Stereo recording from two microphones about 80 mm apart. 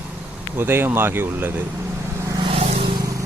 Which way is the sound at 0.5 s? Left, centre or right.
Right.